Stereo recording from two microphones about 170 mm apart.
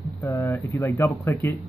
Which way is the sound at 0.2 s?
15° left (ahead or behind).